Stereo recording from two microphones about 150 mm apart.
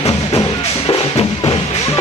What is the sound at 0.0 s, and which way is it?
Music, 40° left (ahead or behind).